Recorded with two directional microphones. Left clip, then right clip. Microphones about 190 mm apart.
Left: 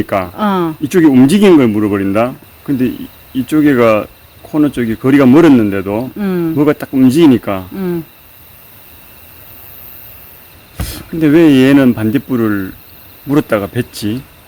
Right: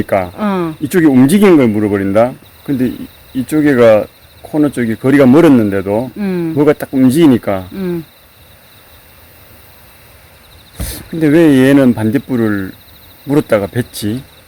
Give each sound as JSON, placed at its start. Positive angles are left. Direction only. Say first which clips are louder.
{"t": 0.0, "sound": "speech", "louder": "right 2 dB", "side_deg": -20}
{"t": 0.3, "sound": "speech", "louder": "left 3 dB", "side_deg": 5}
{"t": 0.9, "sound": "speech", "louder": "left 1 dB", "side_deg": -20}
{"t": 6.1, "sound": "speech", "louder": "left 2 dB", "side_deg": 5}
{"t": 6.6, "sound": "speech", "louder": "right 2 dB", "side_deg": -25}
{"t": 10.8, "sound": "speech", "louder": "left 1 dB", "side_deg": -25}